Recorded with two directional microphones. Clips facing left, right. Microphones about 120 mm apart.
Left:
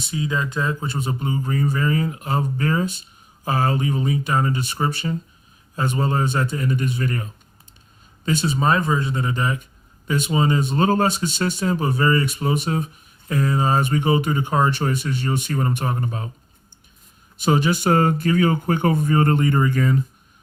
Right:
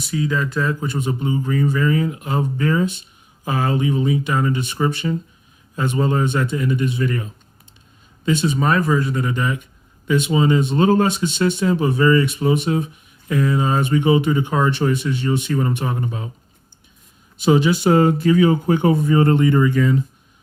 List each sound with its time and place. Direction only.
0.0 s speech: 25° left (ahead or behind); by 8.5 s 40° left (ahead or behind)
8.5 s speech: 25° left (ahead or behind); by 16.2 s 40° left (ahead or behind)
17.3 s speech: 45° left (ahead or behind)